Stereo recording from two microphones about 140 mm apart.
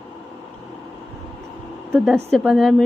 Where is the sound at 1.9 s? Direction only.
Centre (ahead or behind).